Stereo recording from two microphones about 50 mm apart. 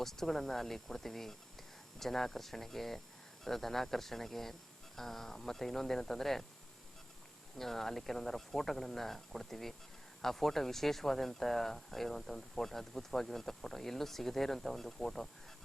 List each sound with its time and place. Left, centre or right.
0.0 s speech: centre
7.6 s speech: centre